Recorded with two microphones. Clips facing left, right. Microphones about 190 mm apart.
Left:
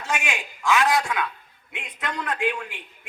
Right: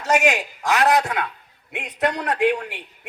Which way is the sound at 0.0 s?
40° right (ahead or behind).